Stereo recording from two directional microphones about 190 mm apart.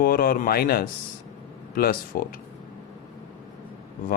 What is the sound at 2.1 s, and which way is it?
Speech, 50° left (ahead or behind).